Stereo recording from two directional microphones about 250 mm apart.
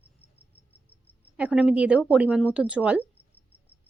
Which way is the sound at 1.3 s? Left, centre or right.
Centre.